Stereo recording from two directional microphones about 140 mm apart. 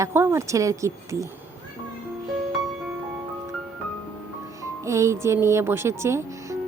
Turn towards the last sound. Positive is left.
turn(degrees=-20)  # may be behind; listen again after turning